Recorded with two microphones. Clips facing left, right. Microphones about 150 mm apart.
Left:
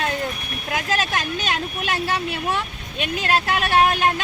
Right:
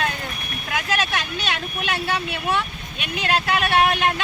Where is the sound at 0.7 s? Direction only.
40° left (ahead or behind).